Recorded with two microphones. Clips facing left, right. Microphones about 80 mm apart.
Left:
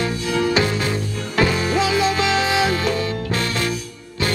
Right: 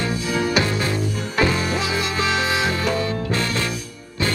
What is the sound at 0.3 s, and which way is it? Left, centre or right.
Music, centre.